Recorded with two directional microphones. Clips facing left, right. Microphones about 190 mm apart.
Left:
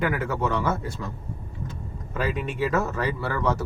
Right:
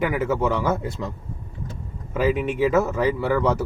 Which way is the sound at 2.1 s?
10° right (ahead or behind).